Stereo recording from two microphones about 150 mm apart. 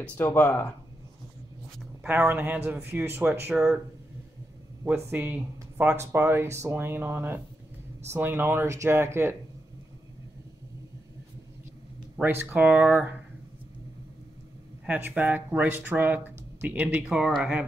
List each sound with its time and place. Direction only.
0.0 s speech: 10° left (ahead or behind)
2.0 s speech: 10° right (ahead or behind)
4.8 s speech: 15° right (ahead or behind)
12.2 s speech: 15° right (ahead or behind)
14.9 s speech: 10° right (ahead or behind)